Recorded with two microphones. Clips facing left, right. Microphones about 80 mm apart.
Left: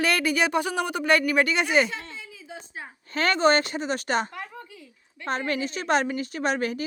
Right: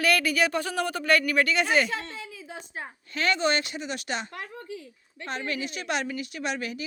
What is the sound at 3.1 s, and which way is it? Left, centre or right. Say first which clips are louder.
A woman's voice: left 5 dB; left.